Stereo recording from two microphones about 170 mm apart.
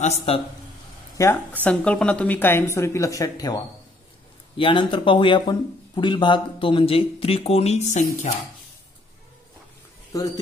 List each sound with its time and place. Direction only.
0.3 s speech: 35° left (ahead or behind)
1.1 s a woman's voice: 15° left (ahead or behind)
4.6 s speech: 30° left (ahead or behind)
10.1 s speech: 20° left (ahead or behind)